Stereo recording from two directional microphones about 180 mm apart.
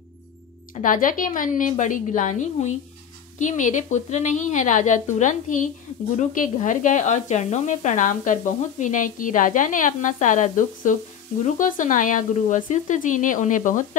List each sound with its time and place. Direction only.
0.8 s speech: 50° left (ahead or behind)